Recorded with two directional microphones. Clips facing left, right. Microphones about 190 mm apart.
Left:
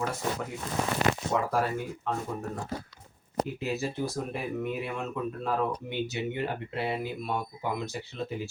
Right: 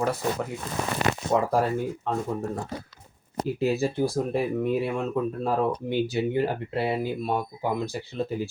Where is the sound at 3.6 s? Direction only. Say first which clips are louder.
Right 7 dB; 30° right (ahead or behind).